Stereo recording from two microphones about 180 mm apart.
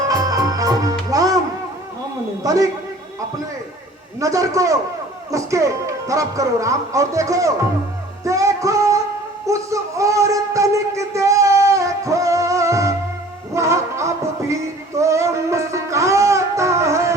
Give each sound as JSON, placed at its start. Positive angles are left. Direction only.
{"t": 0.1, "sound": "music", "side_deg": -20}
{"t": 2.4, "sound": "a man's voice", "side_deg": -20}
{"t": 4.2, "sound": "speech", "side_deg": -20}
{"t": 8.2, "sound": "music", "side_deg": -15}
{"t": 9.5, "sound": "a sound", "side_deg": -15}
{"t": 13.5, "sound": "music", "side_deg": -15}